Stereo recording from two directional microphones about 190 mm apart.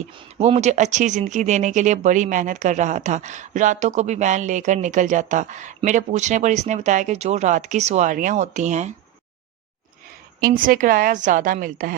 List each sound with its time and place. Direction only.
0.1 s speech: 30° right (ahead or behind)
10.4 s a woman's voice: 45° right (ahead or behind)